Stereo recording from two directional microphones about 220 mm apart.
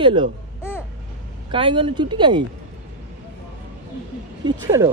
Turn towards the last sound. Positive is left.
turn(degrees=-15)  # may be behind; listen again after turning